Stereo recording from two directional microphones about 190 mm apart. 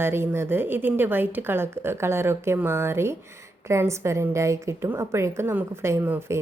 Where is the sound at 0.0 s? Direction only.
10° right (ahead or behind).